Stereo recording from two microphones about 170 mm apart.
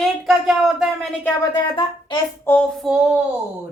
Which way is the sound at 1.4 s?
25° left (ahead or behind).